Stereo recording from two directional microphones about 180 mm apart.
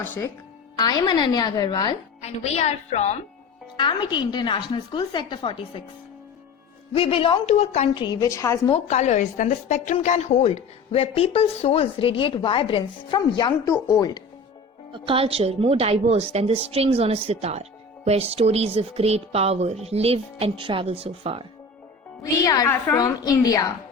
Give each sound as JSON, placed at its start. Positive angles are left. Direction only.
{"t": 0.0, "sound": "speech", "side_deg": 10}
{"t": 0.8, "sound": "a woman's voice", "side_deg": 20}
{"t": 2.2, "sound": "a woman's voice", "side_deg": 35}
{"t": 3.8, "sound": "a woman's voice", "side_deg": 25}
{"t": 6.9, "sound": "a woman's voice", "side_deg": 30}
{"t": 8.0, "sound": "a woman's voice", "side_deg": 20}
{"t": 8.7, "sound": "a woman's voice", "side_deg": 40}
{"t": 14.9, "sound": "a woman's voice", "side_deg": -30}
{"t": 22.2, "sound": "a woman's voice", "side_deg": 20}